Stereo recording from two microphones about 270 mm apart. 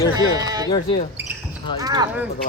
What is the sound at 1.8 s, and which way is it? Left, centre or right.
Speech, centre.